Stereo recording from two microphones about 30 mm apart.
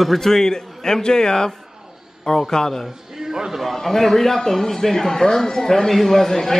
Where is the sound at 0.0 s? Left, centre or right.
Centre.